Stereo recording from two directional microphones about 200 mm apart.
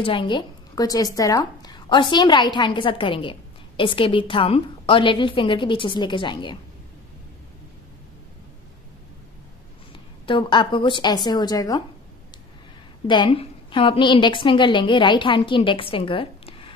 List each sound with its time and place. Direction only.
0.0 s a woman's voice: 25° left (ahead or behind)
9.9 s a woman's voice: 25° left (ahead or behind)
13.0 s a woman's voice: 25° left (ahead or behind)